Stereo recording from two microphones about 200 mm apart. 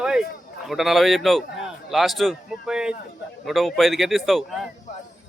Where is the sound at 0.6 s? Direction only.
Centre (ahead or behind).